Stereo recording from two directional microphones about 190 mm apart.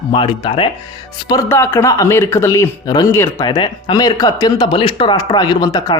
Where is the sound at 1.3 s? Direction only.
15° left (ahead or behind).